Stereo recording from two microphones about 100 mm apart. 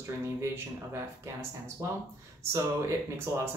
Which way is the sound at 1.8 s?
35° right (ahead or behind).